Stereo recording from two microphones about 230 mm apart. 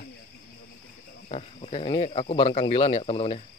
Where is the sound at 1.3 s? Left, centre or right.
Left.